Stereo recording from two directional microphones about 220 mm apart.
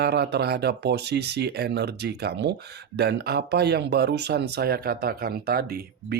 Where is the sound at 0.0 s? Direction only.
50° right (ahead or behind).